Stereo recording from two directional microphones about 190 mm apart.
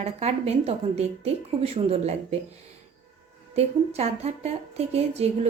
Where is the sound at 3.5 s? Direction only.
35° right (ahead or behind).